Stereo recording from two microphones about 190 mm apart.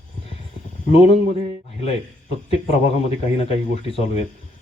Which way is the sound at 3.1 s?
30° left (ahead or behind).